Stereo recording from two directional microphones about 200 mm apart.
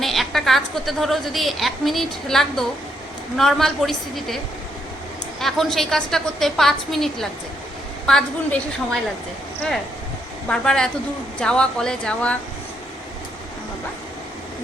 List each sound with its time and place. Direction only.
0.0 s a woman's voice: centre (ahead or behind)
5.4 s a woman's voice: centre (ahead or behind)